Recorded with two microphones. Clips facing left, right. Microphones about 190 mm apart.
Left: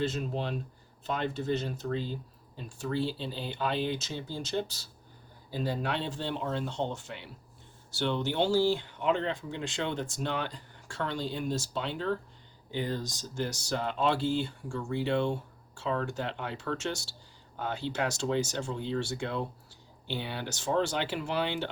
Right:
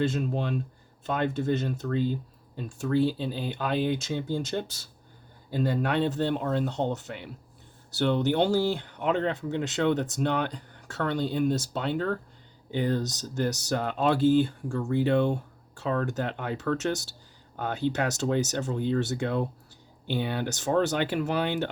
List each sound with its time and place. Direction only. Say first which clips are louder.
0.1 s speech: right 4 dB; 55° right (ahead or behind)
13.3 s speech: right 5 dB; 45° right (ahead or behind)